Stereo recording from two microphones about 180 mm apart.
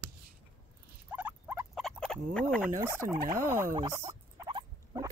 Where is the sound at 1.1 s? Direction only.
10° right (ahead or behind).